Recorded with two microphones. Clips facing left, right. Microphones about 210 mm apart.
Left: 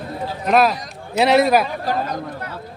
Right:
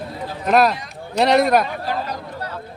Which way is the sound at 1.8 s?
45° left (ahead or behind).